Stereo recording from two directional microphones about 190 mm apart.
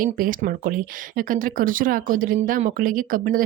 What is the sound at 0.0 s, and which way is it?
Speech, 45° right (ahead or behind).